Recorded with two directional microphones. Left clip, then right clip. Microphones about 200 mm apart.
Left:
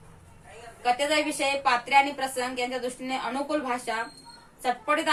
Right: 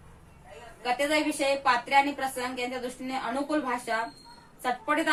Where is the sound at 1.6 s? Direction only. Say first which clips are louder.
Left 3 dB; 15° left (ahead or behind).